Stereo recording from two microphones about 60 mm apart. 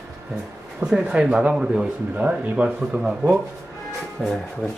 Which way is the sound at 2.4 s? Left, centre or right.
Right.